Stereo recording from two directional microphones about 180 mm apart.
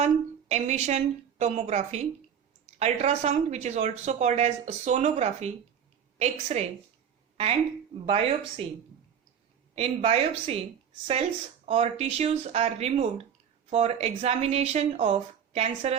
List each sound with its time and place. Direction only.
0.0 s speech: 40° right (ahead or behind)
8.0 s speech: 30° right (ahead or behind)
9.7 s speech: 35° right (ahead or behind)